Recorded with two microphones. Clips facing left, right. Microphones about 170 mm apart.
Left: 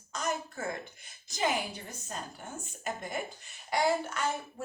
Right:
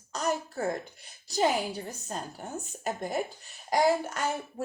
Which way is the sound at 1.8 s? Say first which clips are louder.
Right 4 dB; 40° right (ahead or behind).